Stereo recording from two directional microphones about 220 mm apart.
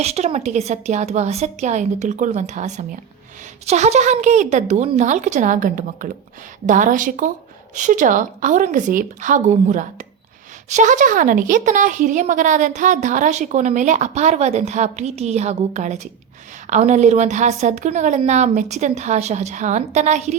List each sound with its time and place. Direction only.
0.0 s speech: 30° right (ahead or behind)